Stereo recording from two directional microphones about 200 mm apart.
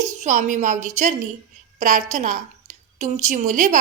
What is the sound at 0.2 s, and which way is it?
A woman's voice, 40° right (ahead or behind).